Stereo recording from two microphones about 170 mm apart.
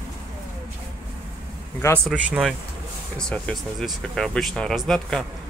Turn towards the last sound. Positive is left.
turn(degrees=0)  # may be behind; listen again after turning